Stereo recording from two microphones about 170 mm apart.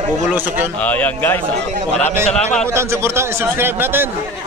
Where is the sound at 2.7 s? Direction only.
15° right (ahead or behind).